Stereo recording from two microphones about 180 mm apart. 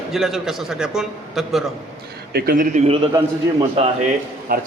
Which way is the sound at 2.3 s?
60° right (ahead or behind).